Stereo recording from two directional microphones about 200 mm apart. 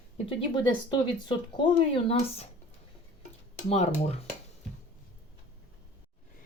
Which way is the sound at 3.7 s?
30° left (ahead or behind).